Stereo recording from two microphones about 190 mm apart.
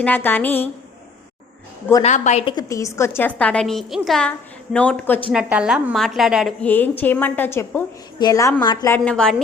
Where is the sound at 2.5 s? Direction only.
15° left (ahead or behind).